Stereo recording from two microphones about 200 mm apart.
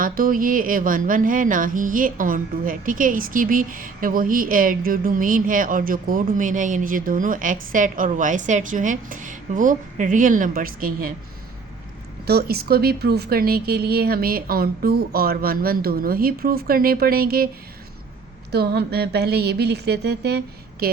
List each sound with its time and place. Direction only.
0.0 s speech: 45° right (ahead or behind)
12.2 s speech: 50° right (ahead or behind)
18.5 s a sound: 55° right (ahead or behind)